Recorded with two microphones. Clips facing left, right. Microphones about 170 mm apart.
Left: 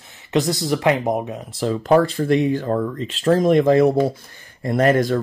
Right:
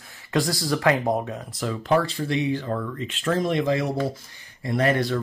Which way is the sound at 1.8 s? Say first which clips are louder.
Left 7 dB; 45° left (ahead or behind).